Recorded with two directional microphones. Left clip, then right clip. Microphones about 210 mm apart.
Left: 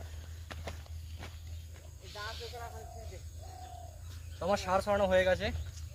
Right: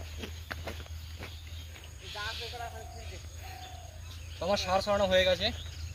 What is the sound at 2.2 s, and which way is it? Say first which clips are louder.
Snake: right 4 dB; 45° right (ahead or behind).